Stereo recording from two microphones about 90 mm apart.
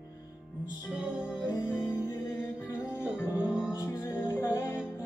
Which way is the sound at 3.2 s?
25° left (ahead or behind).